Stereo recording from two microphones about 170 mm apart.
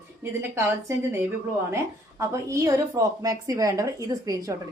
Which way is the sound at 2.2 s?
20° right (ahead or behind).